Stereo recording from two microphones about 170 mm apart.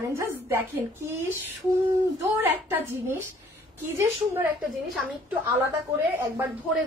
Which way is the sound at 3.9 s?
15° right (ahead or behind).